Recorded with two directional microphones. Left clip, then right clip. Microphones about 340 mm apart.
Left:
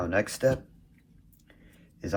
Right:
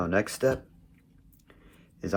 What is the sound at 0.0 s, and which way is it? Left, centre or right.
Speech, centre.